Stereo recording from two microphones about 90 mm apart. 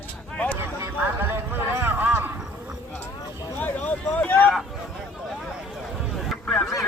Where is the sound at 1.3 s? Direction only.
25° right (ahead or behind).